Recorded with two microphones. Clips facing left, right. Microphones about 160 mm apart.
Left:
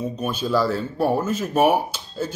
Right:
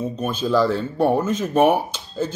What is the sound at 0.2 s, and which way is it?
Speech, 10° left (ahead or behind).